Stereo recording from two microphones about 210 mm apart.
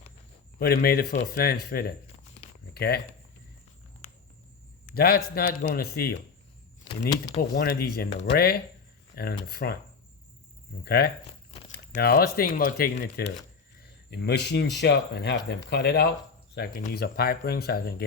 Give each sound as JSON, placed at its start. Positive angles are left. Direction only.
{"t": 0.6, "sound": "speech", "side_deg": 45}
{"t": 4.9, "sound": "speech", "side_deg": 45}
{"t": 6.8, "sound": "speech", "side_deg": 25}
{"t": 7.5, "sound": "speech", "side_deg": 50}
{"t": 10.8, "sound": "speech", "side_deg": 50}